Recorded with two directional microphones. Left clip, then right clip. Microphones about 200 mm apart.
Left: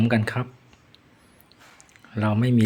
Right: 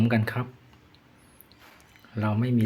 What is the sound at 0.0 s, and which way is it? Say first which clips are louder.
Speech: left 3 dB; 15° left (ahead or behind).